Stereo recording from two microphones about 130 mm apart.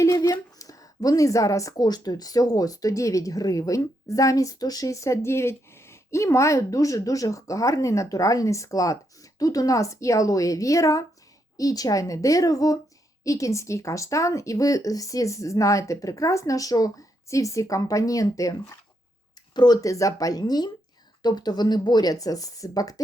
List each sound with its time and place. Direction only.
0.0 s a woman's voice: 25° left (ahead or behind)
19.5 s a woman's voice: 30° left (ahead or behind)